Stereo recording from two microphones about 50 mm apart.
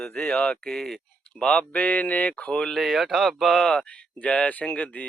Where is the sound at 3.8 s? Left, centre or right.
Left.